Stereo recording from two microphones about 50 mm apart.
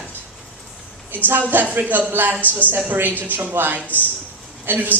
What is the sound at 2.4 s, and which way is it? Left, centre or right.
Speech, left.